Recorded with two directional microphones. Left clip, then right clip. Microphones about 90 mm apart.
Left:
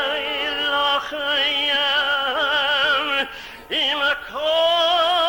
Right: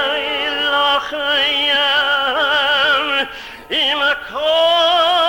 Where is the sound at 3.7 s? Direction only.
25° left (ahead or behind).